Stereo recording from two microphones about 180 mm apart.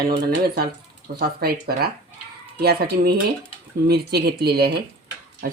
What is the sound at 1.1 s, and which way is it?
Speech, 60° right (ahead or behind).